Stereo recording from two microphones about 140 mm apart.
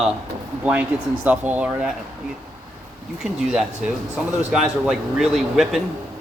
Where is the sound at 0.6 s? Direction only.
10° right (ahead or behind).